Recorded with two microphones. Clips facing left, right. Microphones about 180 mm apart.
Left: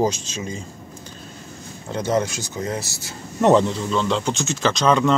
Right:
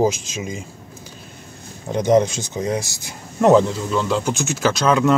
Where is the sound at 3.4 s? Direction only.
Centre (ahead or behind).